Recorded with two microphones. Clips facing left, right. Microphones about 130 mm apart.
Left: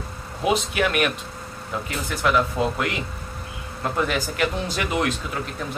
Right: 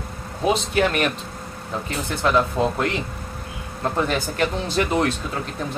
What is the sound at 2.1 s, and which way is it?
Speech, 25° right (ahead or behind).